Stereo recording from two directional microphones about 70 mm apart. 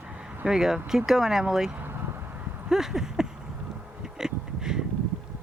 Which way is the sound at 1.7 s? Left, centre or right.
Right.